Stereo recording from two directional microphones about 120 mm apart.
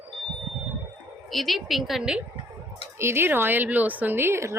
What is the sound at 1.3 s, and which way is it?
Speech, centre (ahead or behind).